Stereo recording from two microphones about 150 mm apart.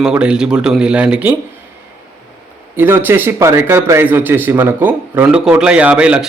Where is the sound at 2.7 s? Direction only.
15° right (ahead or behind).